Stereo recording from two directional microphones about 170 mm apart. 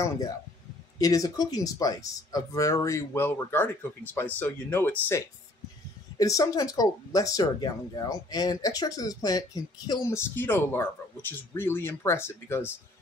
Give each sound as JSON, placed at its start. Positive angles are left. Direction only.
{"t": 0.9, "sound": "speech", "side_deg": 20}